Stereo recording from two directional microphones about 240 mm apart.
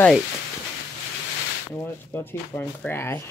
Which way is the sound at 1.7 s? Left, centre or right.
Centre.